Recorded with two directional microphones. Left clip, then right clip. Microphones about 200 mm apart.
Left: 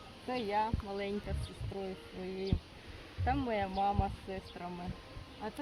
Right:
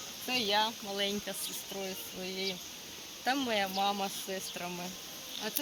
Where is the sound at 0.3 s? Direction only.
10° right (ahead or behind).